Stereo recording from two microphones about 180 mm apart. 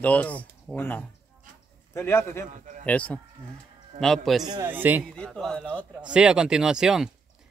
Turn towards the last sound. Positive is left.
turn(degrees=-5)  # may be behind; listen again after turning